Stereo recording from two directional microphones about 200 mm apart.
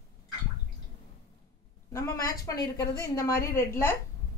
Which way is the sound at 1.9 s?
15° left (ahead or behind).